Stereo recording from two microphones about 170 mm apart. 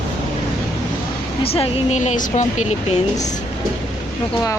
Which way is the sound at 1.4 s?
35° left (ahead or behind).